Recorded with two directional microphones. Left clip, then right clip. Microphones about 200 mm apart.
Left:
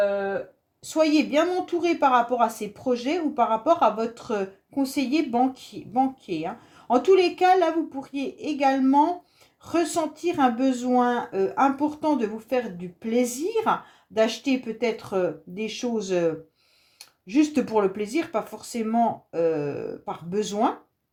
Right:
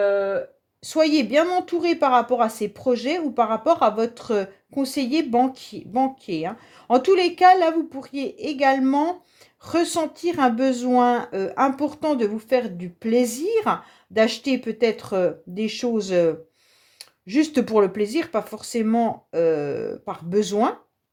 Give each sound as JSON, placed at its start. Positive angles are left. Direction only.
{"t": 0.9, "sound": "a woman's voice", "side_deg": -40}